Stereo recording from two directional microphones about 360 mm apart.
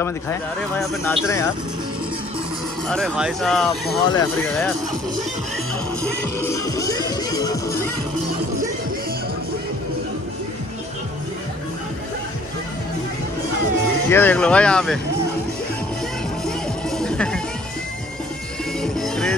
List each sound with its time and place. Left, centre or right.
0.0 s speech: centre
2.9 s speech: centre
6.4 s music: centre
14.0 s speech: centre
16.4 s music: centre
18.8 s music: centre